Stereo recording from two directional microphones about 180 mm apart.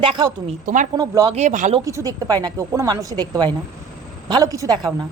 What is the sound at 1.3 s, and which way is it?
Speech, 40° right (ahead or behind).